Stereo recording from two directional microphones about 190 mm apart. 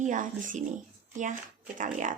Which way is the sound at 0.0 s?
45° right (ahead or behind).